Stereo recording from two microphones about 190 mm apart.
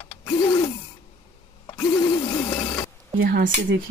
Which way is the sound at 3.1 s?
50° right (ahead or behind).